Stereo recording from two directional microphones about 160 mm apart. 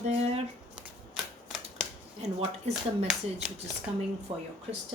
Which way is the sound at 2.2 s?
45° right (ahead or behind).